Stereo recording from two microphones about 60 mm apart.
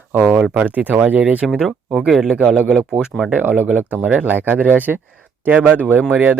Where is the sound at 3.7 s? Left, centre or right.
Right.